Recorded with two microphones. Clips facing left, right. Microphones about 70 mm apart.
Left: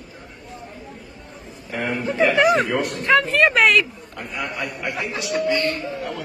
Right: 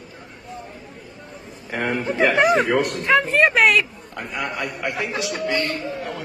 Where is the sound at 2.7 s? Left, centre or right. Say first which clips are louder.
Right 3 dB; right.